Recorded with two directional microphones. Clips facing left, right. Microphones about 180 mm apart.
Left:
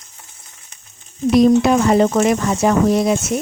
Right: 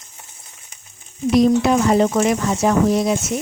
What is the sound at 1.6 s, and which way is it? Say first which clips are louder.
Speech: left 2 dB; 60° left (ahead or behind).